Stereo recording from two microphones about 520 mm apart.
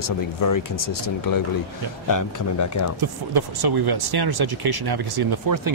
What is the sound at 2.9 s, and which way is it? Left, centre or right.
Speech, right.